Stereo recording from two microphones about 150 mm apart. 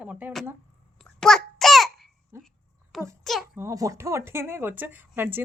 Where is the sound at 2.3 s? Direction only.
15° right (ahead or behind).